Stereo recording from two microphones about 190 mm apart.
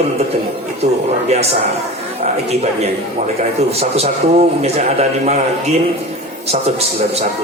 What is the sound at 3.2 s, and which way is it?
A man's voice, 35° right (ahead or behind).